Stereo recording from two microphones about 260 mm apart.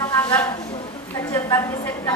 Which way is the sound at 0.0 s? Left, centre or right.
Centre.